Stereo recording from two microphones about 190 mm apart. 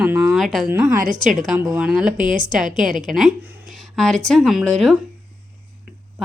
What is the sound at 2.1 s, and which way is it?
Speech, 45° right (ahead or behind).